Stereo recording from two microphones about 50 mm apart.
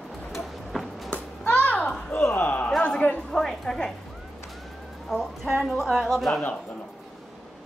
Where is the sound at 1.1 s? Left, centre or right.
Left.